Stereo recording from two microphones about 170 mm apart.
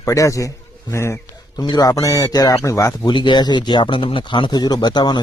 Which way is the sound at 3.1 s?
30° left (ahead or behind).